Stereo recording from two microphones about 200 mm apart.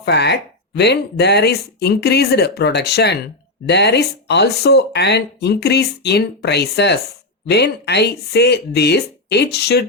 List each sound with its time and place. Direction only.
0.0 s speech: 55° left (ahead or behind)